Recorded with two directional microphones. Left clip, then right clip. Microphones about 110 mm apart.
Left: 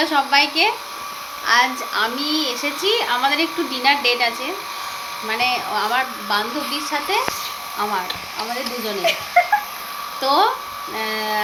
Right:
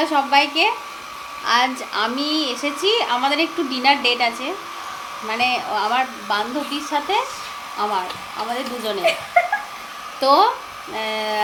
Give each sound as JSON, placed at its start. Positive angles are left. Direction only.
{"t": 0.0, "sound": "a woman's voice", "side_deg": -30}
{"t": 5.3, "sound": "a woman's voice", "side_deg": -40}
{"t": 9.4, "sound": "cat", "side_deg": -25}
{"t": 10.2, "sound": "a woman's voice", "side_deg": -40}